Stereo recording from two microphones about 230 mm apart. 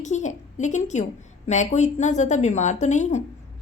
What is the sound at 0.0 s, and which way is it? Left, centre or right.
A woman's voice, left.